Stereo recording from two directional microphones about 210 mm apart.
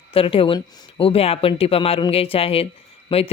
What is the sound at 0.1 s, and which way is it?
Speech, 25° left (ahead or behind).